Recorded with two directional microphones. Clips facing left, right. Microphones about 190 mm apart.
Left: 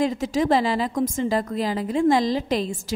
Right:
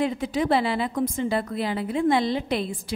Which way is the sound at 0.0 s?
40° left (ahead or behind).